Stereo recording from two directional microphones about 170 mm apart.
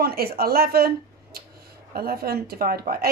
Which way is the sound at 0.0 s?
65° right (ahead or behind).